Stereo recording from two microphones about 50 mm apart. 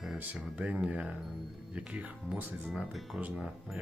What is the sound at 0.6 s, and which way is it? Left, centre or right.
Speech, right.